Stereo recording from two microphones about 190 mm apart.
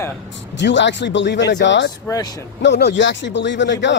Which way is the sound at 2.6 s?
65° left (ahead or behind).